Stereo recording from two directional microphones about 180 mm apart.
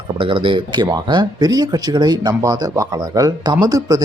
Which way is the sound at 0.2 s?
30° right (ahead or behind).